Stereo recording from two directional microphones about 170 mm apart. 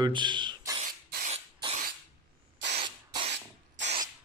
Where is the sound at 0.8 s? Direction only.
60° right (ahead or behind).